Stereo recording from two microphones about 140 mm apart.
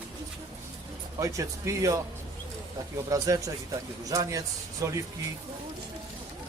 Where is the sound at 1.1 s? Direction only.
25° right (ahead or behind).